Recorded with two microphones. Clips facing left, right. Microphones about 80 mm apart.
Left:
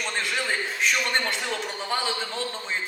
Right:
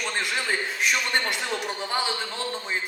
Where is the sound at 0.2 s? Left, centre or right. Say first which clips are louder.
Even; centre.